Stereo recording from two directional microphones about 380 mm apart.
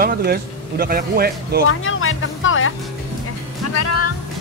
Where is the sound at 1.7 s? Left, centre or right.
Left.